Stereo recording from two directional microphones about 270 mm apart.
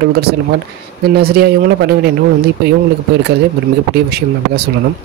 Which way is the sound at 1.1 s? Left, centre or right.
Right.